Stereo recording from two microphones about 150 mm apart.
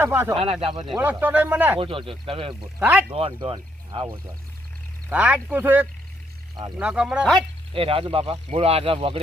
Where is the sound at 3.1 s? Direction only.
40° right (ahead or behind).